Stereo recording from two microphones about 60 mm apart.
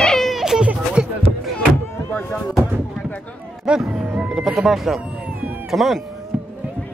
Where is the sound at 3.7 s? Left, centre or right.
Centre.